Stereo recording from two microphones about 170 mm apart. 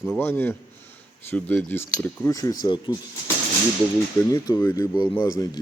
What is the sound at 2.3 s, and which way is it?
Speech, 20° left (ahead or behind).